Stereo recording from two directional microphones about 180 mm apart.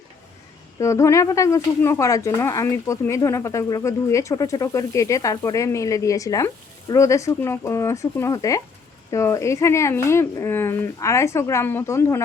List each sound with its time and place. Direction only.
0.8 s speech: 15° left (ahead or behind)